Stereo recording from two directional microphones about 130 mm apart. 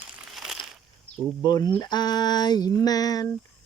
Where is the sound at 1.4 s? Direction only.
35° left (ahead or behind).